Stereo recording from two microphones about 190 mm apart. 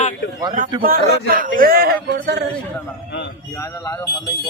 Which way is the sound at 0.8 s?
50° right (ahead or behind).